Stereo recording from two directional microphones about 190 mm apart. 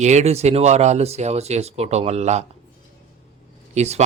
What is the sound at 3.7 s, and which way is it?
Speech, 35° right (ahead or behind).